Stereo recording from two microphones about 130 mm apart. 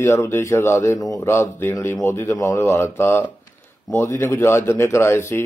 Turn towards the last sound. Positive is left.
turn(degrees=20)  # may be behind; listen again after turning